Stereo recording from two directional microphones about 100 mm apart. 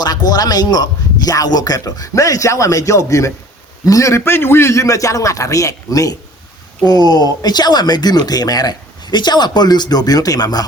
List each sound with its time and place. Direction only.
0.0 s a man's voice: 40° left (ahead or behind)